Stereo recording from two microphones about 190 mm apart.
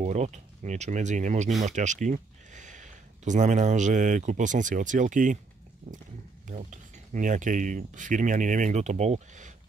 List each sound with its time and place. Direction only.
0.0 s speech: 35° right (ahead or behind)
6.5 s speech: 40° right (ahead or behind)